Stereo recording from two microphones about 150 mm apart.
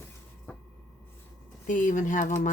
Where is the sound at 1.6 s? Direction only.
60° left (ahead or behind).